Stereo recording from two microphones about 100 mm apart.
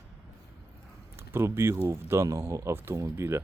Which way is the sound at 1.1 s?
25° right (ahead or behind).